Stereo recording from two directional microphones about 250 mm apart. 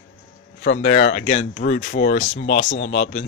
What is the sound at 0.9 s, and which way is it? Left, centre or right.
Speech, left.